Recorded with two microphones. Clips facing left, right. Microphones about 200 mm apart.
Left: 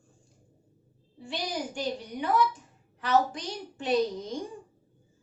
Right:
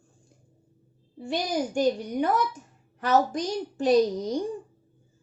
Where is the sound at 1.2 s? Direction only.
45° right (ahead or behind).